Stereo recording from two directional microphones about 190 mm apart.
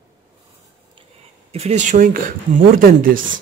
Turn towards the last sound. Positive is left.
turn(degrees=-50)  # may be behind; listen again after turning